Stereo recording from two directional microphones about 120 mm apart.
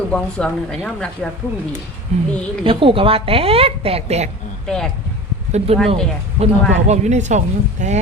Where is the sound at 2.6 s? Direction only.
45° right (ahead or behind); by 4.3 s 65° right (ahead or behind).